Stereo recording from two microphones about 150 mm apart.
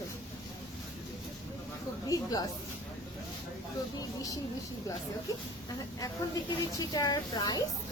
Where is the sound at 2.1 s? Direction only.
25° left (ahead or behind).